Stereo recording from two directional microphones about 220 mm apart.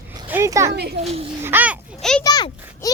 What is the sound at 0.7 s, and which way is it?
Speech, 50° right (ahead or behind).